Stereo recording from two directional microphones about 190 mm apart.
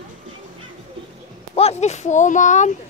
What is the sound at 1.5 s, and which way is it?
Speech, 35° left (ahead or behind).